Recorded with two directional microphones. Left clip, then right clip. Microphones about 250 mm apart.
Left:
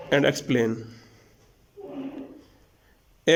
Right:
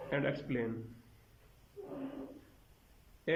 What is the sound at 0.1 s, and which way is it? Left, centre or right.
Speech, left.